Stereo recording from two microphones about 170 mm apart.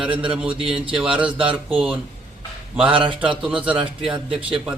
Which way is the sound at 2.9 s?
30° right (ahead or behind).